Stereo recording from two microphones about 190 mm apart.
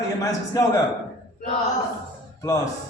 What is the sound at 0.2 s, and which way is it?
Speech, 15° left (ahead or behind).